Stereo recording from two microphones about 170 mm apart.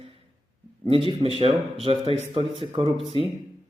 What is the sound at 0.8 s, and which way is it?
Speech, 35° right (ahead or behind).